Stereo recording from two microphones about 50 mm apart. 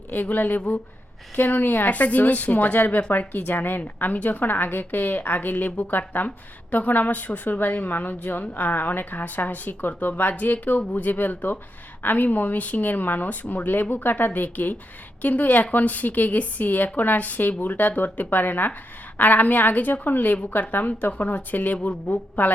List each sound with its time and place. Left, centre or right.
0.1 s a woman's voice: left